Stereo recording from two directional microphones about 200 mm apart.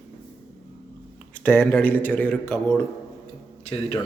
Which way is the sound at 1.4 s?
10° left (ahead or behind).